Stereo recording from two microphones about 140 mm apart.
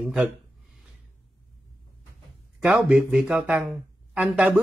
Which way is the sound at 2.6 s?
10° right (ahead or behind).